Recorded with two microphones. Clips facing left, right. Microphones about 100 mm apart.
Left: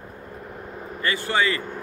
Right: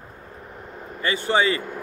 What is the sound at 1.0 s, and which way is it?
Speech, 20° right (ahead or behind).